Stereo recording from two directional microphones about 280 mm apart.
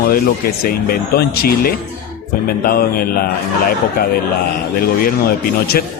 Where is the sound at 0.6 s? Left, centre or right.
Left.